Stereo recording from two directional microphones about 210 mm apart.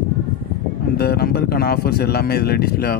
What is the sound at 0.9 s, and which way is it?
Speech, 50° left (ahead or behind).